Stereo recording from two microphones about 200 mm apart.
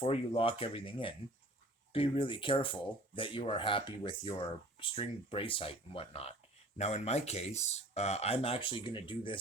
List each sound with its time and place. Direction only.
0.0 s speech: 30° left (ahead or behind)